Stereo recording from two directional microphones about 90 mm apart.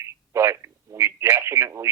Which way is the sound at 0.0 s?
30° right (ahead or behind).